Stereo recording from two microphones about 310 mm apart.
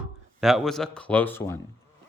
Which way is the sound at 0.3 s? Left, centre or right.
Centre.